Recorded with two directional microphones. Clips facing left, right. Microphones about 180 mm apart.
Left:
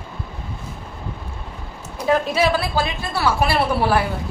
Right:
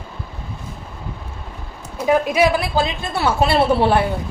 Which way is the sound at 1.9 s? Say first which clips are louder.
Right 2 dB; 15° right (ahead or behind).